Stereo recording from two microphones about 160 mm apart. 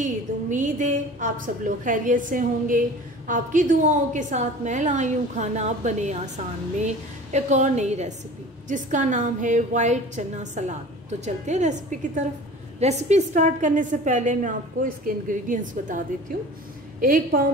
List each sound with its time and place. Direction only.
0.0 s a woman's voice: 50° right (ahead or behind)